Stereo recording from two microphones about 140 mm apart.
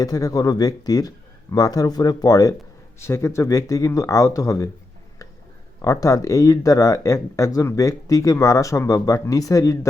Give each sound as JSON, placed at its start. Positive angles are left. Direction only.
{"t": 0.0, "sound": "speech", "side_deg": 25}
{"t": 5.8, "sound": "speech", "side_deg": 25}